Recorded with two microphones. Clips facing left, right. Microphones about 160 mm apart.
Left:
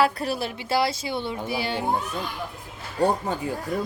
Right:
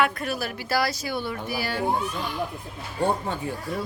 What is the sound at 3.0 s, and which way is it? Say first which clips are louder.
Speech: left 2 dB; 40° left (ahead or behind).